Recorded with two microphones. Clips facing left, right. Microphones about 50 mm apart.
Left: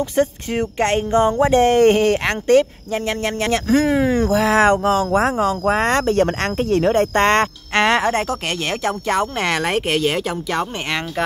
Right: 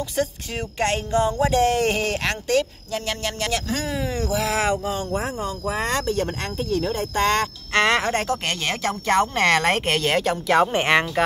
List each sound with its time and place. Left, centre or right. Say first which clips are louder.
0.1 s speech: left 7 dB; left
3.8 s speech: left 9 dB; left
4.8 s speech: left 9 dB; left
5.8 s speech: left 4 dB; left
6.2 s speech: left 7 dB; left
7.7 s a woman's voice: left 3 dB; left; by 10.3 s centre
10.5 s speech: right 7 dB; centre